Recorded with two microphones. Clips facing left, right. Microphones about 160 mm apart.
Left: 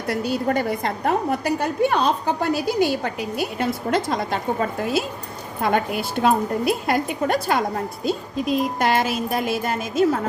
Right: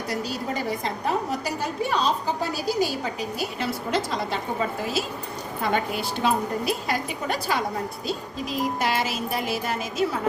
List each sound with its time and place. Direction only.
0.1 s a woman's voice: 60° left (ahead or behind)
5.6 s a woman's voice: 50° left (ahead or behind)